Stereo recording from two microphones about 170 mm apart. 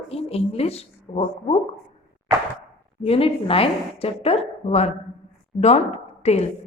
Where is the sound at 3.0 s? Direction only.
35° left (ahead or behind).